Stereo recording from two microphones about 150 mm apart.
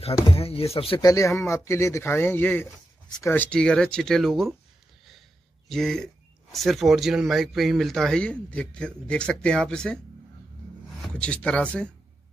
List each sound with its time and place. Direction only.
0.0 s speech: 40° left (ahead or behind)
1.0 s speech: 20° left (ahead or behind); by 4.6 s centre (ahead or behind)
5.7 s speech: 5° left (ahead or behind)